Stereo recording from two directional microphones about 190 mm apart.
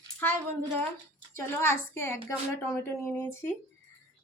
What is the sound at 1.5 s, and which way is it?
Speech, 10° left (ahead or behind).